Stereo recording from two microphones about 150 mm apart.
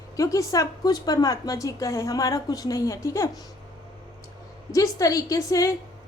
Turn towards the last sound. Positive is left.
turn(degrees=20)  # may be behind; listen again after turning